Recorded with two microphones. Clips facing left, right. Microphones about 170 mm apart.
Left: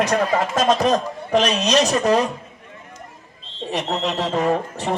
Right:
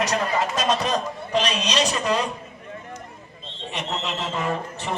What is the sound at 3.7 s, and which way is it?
Speech, 40° left (ahead or behind).